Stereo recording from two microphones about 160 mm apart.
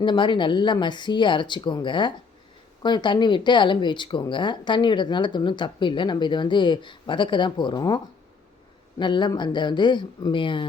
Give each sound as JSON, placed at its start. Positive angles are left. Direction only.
{"t": 0.0, "sound": "speech", "side_deg": 30}